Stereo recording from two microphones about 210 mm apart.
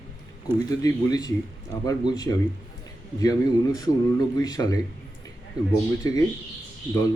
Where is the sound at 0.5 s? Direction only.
20° left (ahead or behind).